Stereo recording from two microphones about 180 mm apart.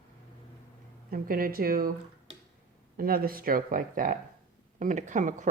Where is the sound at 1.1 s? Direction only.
55° right (ahead or behind).